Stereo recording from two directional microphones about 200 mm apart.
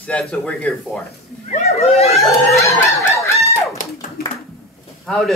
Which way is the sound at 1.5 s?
35° left (ahead or behind).